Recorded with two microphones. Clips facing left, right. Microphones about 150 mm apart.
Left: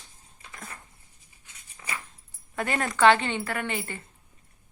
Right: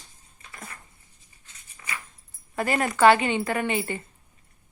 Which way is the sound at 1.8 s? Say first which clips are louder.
Left 1 dB; 10° left (ahead or behind).